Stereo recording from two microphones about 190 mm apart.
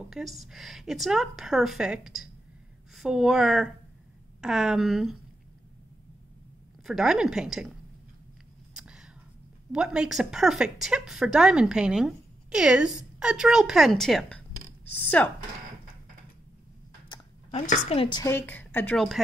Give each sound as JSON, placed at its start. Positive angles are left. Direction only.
{"t": 0.1, "sound": "speech", "side_deg": 0}
{"t": 6.8, "sound": "speech", "side_deg": 0}
{"t": 8.7, "sound": "a sound", "side_deg": -5}
{"t": 9.7, "sound": "a woman's voice", "side_deg": -5}
{"t": 17.1, "sound": "a sound", "side_deg": 35}
{"t": 18.2, "sound": "a woman's voice", "side_deg": 10}